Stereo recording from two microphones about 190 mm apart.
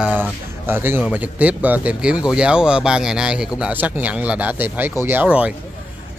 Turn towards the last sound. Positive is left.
turn(degrees=-5)  # may be behind; listen again after turning